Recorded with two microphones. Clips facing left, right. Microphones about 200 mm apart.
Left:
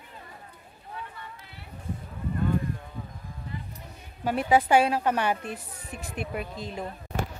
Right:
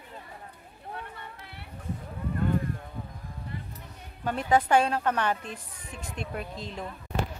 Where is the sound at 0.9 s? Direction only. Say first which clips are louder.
Even; 60° right (ahead or behind).